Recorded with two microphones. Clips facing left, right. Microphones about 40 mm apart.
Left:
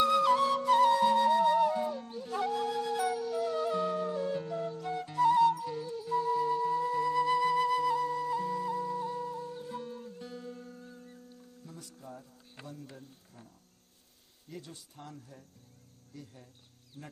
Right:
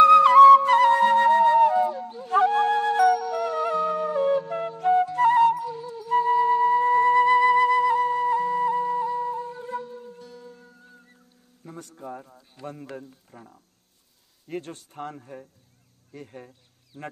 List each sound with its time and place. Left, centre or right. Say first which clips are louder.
0.0 s flute: right 14 dB; right
3.3 s music: right 6 dB; right
4.5 s flute: right 12 dB; right
5.7 s music: right 3 dB; centre
6.0 s flute: right 10 dB; right
9.0 s wind instrument: right 9 dB; right
9.3 s music: right 8 dB; right
10.2 s music: left 1 dB; centre
11.6 s music: right 11 dB; right
12.8 s a sound: right 11 dB; right
14.5 s speech: right 12 dB; right
17.0 s speech: right 11 dB; right